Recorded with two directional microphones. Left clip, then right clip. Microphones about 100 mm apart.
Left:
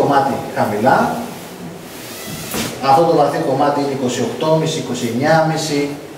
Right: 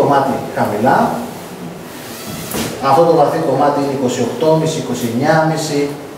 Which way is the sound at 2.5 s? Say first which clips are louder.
Even; 5° right (ahead or behind).